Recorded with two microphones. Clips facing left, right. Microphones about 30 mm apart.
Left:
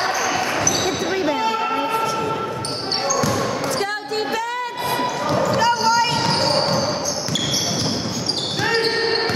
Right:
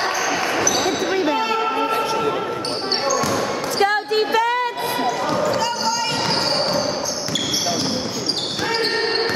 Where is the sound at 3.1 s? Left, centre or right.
Centre.